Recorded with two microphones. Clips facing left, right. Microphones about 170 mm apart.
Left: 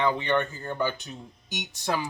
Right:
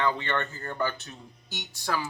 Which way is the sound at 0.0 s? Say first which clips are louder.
Left 3 dB; 15° left (ahead or behind).